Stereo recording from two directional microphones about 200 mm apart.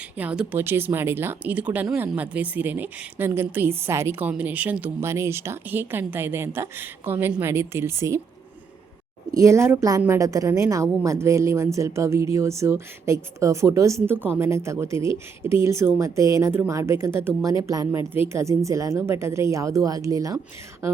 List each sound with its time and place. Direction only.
0.2 s speech: 5° right (ahead or behind)
9.3 s speech: 15° right (ahead or behind)